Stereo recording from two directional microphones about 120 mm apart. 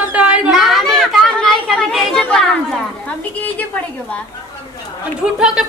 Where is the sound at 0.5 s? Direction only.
Centre (ahead or behind).